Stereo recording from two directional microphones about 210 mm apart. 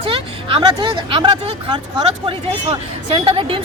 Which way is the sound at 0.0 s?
25° right (ahead or behind).